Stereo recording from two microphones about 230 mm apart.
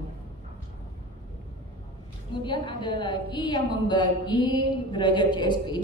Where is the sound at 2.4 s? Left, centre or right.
Centre.